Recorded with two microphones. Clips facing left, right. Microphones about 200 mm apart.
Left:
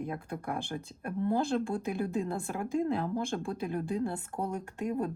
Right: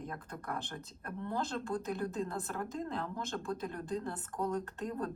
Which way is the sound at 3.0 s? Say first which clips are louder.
Left 8 dB; 35° left (ahead or behind).